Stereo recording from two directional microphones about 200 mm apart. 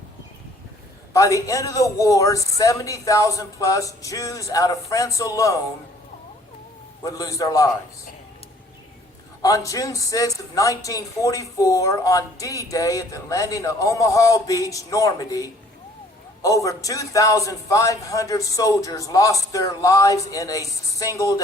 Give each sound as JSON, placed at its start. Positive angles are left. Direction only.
{"t": 1.1, "sound": "speech", "side_deg": 15}
{"t": 7.0, "sound": "speech", "side_deg": 15}
{"t": 9.4, "sound": "speech", "side_deg": 15}